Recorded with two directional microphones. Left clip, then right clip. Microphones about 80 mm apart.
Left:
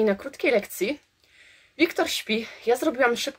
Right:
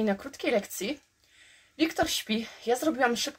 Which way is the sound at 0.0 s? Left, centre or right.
Left.